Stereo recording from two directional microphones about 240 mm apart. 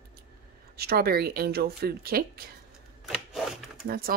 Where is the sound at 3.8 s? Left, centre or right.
Right.